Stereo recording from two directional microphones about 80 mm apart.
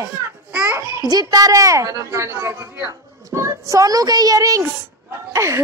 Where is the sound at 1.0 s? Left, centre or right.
Right.